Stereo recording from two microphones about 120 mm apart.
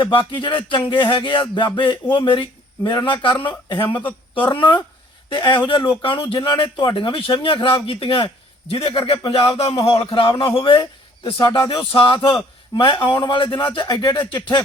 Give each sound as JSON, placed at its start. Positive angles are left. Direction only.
{"t": 0.0, "sound": "speech", "side_deg": 45}
{"t": 3.8, "sound": "speech", "side_deg": 15}
{"t": 5.3, "sound": "speech", "side_deg": 40}
{"t": 13.8, "sound": "speech", "side_deg": 30}